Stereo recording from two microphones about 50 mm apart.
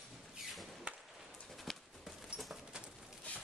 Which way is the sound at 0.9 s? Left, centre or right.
Right.